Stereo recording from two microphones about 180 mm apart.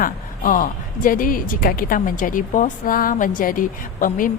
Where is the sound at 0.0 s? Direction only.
50° left (ahead or behind).